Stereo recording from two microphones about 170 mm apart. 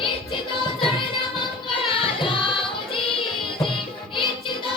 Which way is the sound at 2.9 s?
30° left (ahead or behind).